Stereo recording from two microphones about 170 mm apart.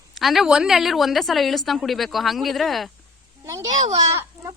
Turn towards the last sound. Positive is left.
turn(degrees=-20)  # may be behind; listen again after turning